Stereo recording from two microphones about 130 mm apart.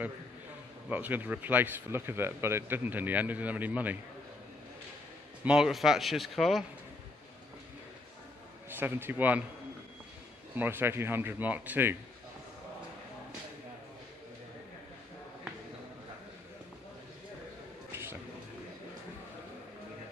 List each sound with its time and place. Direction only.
0.8 s speech: 15° right (ahead or behind)
5.4 s speech: 5° right (ahead or behind)
8.6 s speech: 15° right (ahead or behind)
10.5 s speech: 15° right (ahead or behind)